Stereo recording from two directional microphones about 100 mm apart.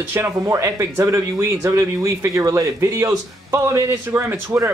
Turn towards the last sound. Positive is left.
turn(degrees=-25)  # may be behind; listen again after turning